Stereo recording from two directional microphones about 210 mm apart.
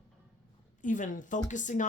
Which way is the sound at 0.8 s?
35° left (ahead or behind).